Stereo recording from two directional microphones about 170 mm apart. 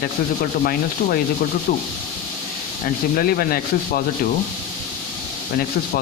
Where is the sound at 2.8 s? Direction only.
60° left (ahead or behind).